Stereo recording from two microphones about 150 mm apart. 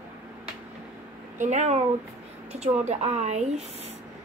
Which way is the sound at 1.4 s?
55° right (ahead or behind).